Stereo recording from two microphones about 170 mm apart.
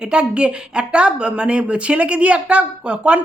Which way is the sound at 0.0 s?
5° right (ahead or behind).